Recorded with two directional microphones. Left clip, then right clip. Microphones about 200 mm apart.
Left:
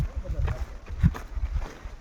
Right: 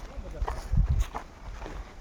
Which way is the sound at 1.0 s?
20° right (ahead or behind).